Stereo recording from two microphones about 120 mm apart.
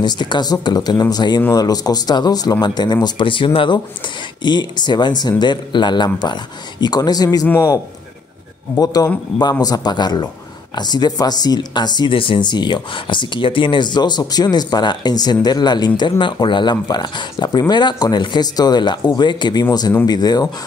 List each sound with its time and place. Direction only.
0.0 s speech: 40° left (ahead or behind)
8.7 s speech: 30° left (ahead or behind)